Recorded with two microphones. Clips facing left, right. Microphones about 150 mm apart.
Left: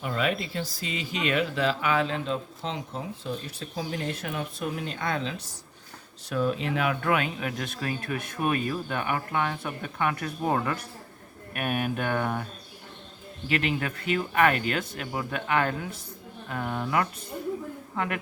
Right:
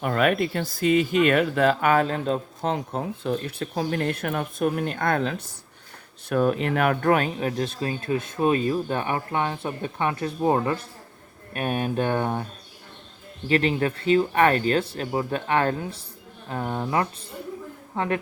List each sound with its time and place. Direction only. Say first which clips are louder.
0.0 s speech: right 6 dB; 55° right (ahead or behind); by 12.5 s 30° right (ahead or behind)
13.5 s a man's voice: right 6 dB; 35° right (ahead or behind)